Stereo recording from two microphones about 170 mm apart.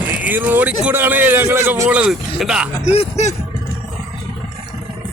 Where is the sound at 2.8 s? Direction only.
40° left (ahead or behind).